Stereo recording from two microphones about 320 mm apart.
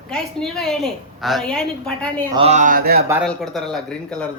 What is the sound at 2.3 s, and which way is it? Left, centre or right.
Speech, centre.